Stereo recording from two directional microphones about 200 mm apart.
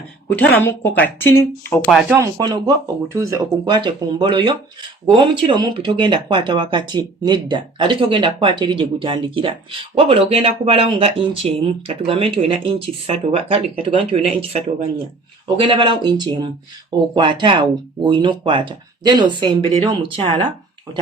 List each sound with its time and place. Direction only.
0.3 s speech: 10° left (ahead or behind)
1.9 s speech: centre (ahead or behind)
2.1 s speech: 20° right (ahead or behind)